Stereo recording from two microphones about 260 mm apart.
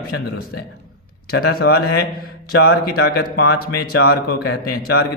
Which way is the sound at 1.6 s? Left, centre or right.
Left.